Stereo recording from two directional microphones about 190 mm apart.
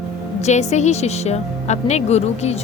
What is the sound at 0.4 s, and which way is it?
A woman's voice, 35° left (ahead or behind).